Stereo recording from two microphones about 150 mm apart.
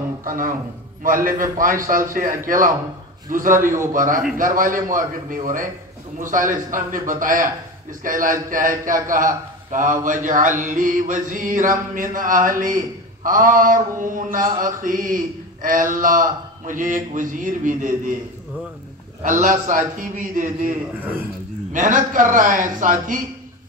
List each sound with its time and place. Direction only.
0.2 s a man's voice: 65° right (ahead or behind)
19.2 s speech: 60° right (ahead or behind)
21.7 s speech: 60° right (ahead or behind)